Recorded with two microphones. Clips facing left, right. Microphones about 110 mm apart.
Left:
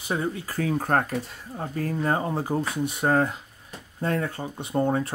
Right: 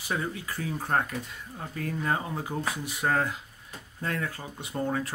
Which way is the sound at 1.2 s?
35° left (ahead or behind).